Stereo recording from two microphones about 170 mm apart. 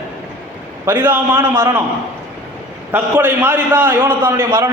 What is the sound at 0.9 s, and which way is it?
Speech, 10° right (ahead or behind).